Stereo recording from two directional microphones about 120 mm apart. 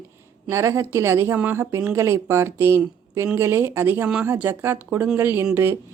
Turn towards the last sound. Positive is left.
turn(degrees=-20)  # may be behind; listen again after turning